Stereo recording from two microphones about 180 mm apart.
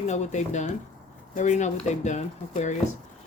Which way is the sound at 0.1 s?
40° left (ahead or behind).